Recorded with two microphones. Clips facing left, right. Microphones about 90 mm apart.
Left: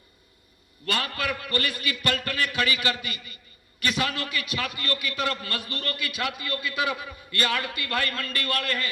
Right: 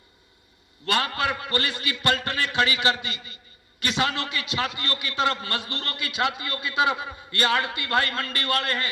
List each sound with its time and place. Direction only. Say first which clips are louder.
0.9 s a man's voice: right 4 dB; 25° right (ahead or behind)